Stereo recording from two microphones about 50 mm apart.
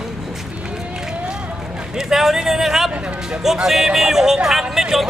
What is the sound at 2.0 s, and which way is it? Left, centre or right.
Speech, centre.